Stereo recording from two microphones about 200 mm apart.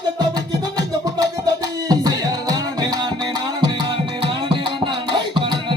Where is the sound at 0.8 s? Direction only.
20° right (ahead or behind).